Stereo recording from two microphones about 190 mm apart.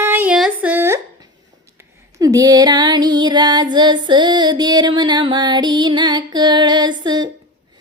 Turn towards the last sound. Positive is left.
turn(degrees=-25)  # may be behind; listen again after turning